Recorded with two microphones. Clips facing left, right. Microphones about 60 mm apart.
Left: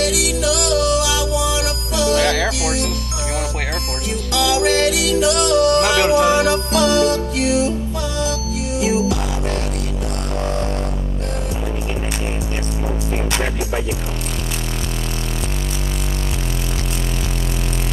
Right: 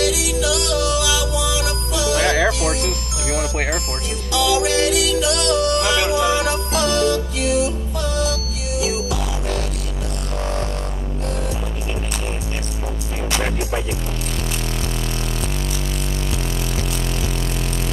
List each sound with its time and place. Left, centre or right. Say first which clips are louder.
0.0 s music: left 1 dB; left
2.1 s music: right 2 dB; right
4.3 s music: left 1 dB; left
8.7 s music: left 4 dB; left